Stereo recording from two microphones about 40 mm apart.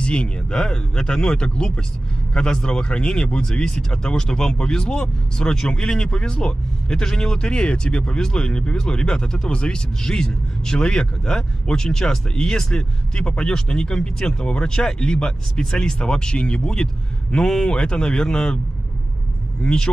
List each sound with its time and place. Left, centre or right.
0.0 s speech: left
19.6 s speech: centre